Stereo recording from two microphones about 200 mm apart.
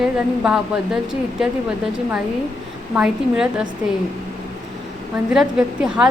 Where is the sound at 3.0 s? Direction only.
5° right (ahead or behind).